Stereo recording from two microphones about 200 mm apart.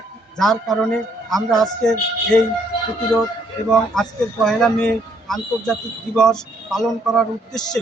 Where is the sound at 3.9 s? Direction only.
Centre (ahead or behind).